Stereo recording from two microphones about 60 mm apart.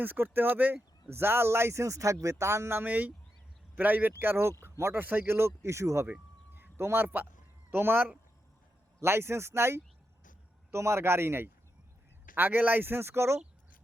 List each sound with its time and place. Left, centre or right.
0.0 s speech: right
2.4 s speech: right
2.8 s speech: right
4.9 s speech: right
6.5 s a sound: right
7.7 s speech: right
12.4 s speech: right